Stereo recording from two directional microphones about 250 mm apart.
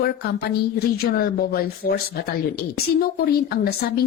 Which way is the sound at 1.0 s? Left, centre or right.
Left.